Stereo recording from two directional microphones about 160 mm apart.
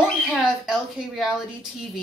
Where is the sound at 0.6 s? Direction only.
Centre (ahead or behind).